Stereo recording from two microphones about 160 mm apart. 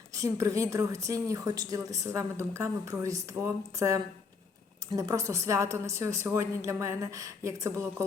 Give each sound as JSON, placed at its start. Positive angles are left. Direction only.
{"t": 0.1, "sound": "a woman's voice", "side_deg": -20}